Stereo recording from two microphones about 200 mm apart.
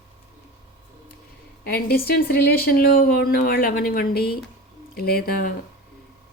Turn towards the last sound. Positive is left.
turn(degrees=50)  # may be behind; listen again after turning